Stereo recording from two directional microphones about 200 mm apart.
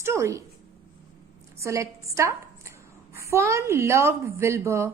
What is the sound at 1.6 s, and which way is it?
A woman's voice, 15° right (ahead or behind).